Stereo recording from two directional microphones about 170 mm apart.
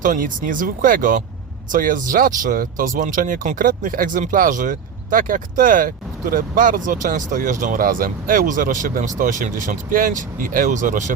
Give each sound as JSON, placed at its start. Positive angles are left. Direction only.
{"t": 0.0, "sound": "speech", "side_deg": -50}